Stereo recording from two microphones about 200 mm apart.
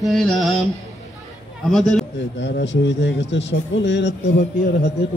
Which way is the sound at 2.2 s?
65° left (ahead or behind).